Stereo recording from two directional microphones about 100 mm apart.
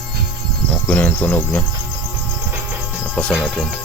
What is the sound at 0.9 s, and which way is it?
Cricket, 15° left (ahead or behind).